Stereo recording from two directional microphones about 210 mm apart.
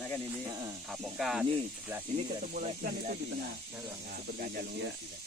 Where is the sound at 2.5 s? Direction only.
40° right (ahead or behind).